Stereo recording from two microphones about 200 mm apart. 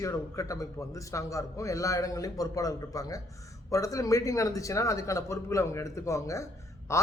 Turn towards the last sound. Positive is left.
turn(degrees=15)  # may be behind; listen again after turning